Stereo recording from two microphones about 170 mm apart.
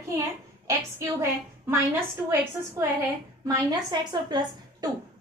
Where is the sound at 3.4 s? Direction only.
20° right (ahead or behind).